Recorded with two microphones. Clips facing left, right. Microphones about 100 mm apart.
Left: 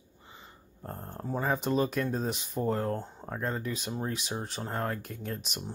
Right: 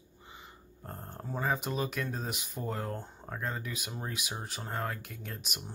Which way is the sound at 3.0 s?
15° left (ahead or behind).